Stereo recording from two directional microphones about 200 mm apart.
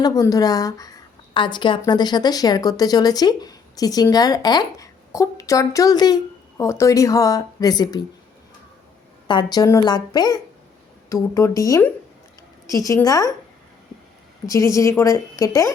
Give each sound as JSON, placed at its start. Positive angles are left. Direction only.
{"t": 0.0, "sound": "a woman's voice", "side_deg": 15}
{"t": 9.2, "sound": "a woman's voice", "side_deg": 20}
{"t": 14.4, "sound": "a woman's voice", "side_deg": 15}